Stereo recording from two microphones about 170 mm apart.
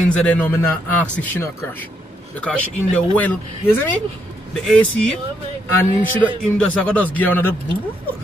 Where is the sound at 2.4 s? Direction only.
5° left (ahead or behind).